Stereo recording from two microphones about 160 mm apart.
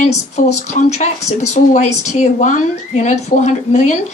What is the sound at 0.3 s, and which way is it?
Speech, 45° left (ahead or behind).